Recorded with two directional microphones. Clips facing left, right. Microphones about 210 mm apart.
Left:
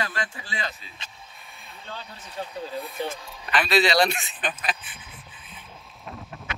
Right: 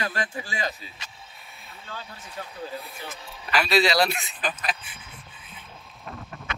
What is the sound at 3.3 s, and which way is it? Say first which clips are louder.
Speech: right 2 dB; centre (ahead or behind).